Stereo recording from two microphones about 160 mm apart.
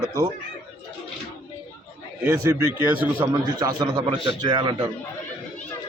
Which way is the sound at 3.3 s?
25° right (ahead or behind).